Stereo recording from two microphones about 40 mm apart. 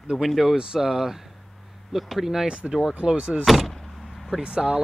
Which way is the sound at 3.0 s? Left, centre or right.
Right.